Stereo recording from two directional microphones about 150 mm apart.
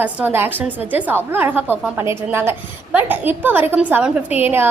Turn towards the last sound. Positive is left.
turn(degrees=-15)  # may be behind; listen again after turning